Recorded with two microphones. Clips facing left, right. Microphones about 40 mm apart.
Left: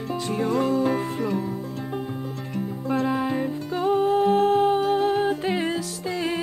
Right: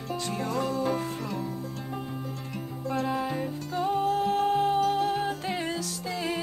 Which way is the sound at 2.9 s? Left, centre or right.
Centre.